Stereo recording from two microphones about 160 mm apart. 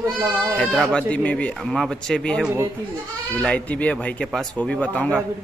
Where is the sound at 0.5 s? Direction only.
5° left (ahead or behind).